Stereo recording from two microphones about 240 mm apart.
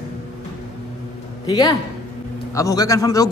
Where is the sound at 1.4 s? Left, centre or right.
Centre.